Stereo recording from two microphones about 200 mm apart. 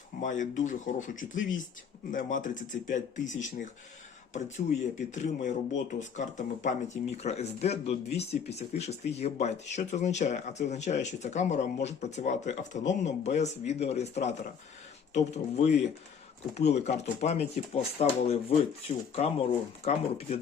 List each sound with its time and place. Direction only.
0.2 s speech: 40° left (ahead or behind)
19.8 s speech: 30° left (ahead or behind)